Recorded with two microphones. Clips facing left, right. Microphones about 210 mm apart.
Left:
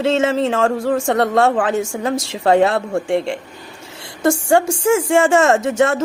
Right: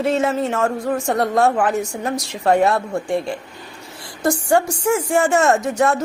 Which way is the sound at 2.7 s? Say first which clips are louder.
Left 2 dB; 25° left (ahead or behind).